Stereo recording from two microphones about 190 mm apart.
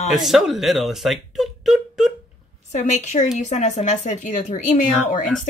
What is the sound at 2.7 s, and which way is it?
Speech, 35° left (ahead or behind).